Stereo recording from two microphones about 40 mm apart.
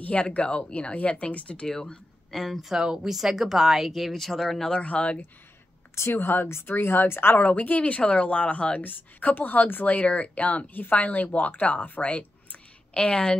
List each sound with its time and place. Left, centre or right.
0.0 s speech: left
1.1 s speech: left
2.3 s speech: centre
2.7 s speech: centre
4.1 s speech: centre
4.8 s speech: left
6.0 s speech: left
7.3 s a woman's voice: left
8.0 s speech: left
8.8 s a woman's voice: left
10.7 s a woman's voice: left
11.0 s speech: left
12.9 s speech: left